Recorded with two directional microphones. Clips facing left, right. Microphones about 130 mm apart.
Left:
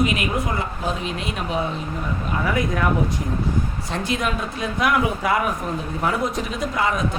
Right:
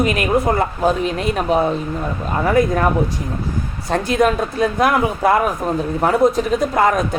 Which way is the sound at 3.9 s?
45° right (ahead or behind).